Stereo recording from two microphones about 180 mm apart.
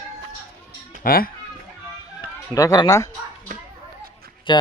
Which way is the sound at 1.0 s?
55° left (ahead or behind).